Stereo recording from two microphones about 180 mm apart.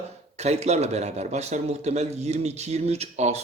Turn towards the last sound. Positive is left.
turn(degrees=-35)  # may be behind; listen again after turning